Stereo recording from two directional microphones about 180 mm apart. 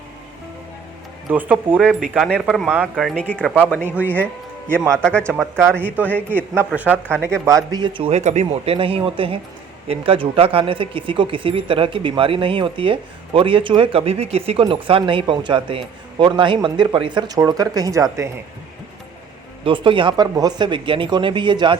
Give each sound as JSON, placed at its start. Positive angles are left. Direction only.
{"t": 1.3, "sound": "speech", "side_deg": -10}
{"t": 1.8, "sound": "a man's voice", "side_deg": 0}
{"t": 5.3, "sound": "speech", "side_deg": -15}
{"t": 6.1, "sound": "a man's voice", "side_deg": 10}
{"t": 6.7, "sound": "speech", "side_deg": -10}
{"t": 7.4, "sound": "speech", "side_deg": -20}
{"t": 19.6, "sound": "speech", "side_deg": -30}